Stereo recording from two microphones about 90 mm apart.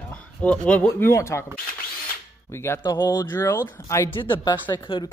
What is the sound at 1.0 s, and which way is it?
Speech, 30° left (ahead or behind).